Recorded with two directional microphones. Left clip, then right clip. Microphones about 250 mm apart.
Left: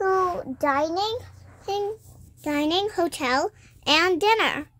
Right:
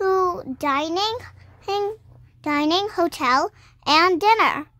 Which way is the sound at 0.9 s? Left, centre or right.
Right.